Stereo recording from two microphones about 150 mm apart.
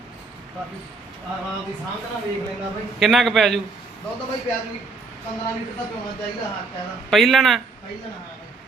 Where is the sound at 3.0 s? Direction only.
Centre (ahead or behind).